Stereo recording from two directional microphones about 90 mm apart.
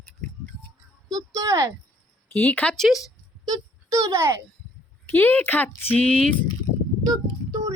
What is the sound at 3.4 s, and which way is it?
Speech, 40° right (ahead or behind).